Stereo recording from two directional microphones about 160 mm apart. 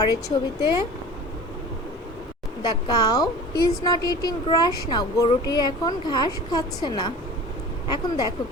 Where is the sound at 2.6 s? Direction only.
30° left (ahead or behind).